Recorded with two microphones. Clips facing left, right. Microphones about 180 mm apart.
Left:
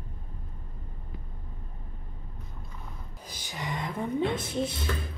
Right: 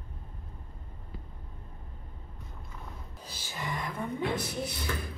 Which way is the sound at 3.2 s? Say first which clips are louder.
Left 1 dB; 15° left (ahead or behind).